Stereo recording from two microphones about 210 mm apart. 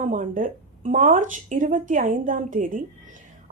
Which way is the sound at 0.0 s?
40° right (ahead or behind).